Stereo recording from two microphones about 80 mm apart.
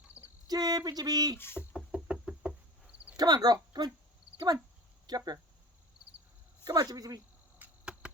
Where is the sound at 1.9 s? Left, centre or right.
Centre.